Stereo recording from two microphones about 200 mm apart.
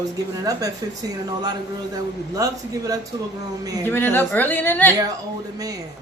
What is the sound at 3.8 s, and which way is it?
A woman's voice, 10° left (ahead or behind).